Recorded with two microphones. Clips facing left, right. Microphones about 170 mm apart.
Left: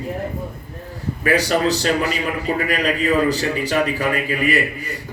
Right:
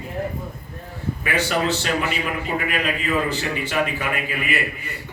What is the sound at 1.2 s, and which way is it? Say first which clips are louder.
A man's voice: left 5 dB; 40° left (ahead or behind).